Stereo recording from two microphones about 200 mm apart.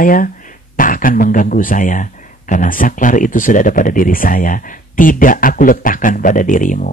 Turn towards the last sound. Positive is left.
turn(degrees=40)  # may be behind; listen again after turning